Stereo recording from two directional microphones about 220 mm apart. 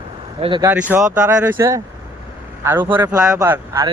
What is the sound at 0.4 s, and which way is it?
Speech, 20° right (ahead or behind).